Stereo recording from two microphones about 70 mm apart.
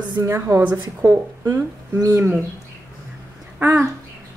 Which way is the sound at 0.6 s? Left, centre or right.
Right.